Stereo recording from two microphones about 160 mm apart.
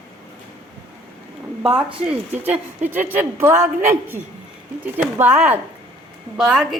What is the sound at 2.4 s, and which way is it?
A woman's voice, 10° right (ahead or behind).